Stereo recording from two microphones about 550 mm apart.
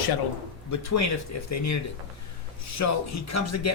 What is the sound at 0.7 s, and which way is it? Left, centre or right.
Speech, left.